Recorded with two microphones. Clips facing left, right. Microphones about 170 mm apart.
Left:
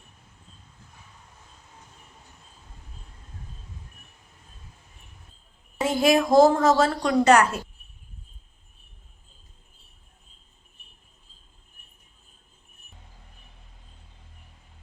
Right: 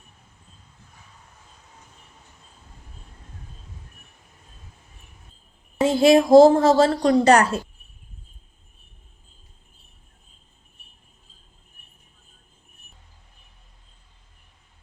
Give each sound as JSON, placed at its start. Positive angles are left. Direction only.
{"t": 5.8, "sound": "a woman's voice", "side_deg": -30}